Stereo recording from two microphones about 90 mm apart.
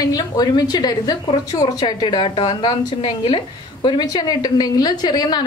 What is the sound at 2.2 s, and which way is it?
A woman's voice, 70° left (ahead or behind).